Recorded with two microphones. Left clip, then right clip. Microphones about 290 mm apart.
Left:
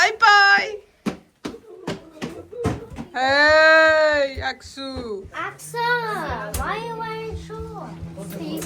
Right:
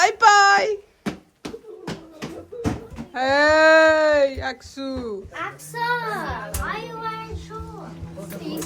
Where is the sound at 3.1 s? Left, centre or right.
Centre.